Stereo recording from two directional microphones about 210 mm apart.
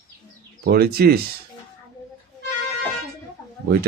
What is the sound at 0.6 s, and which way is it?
Speech, 45° right (ahead or behind).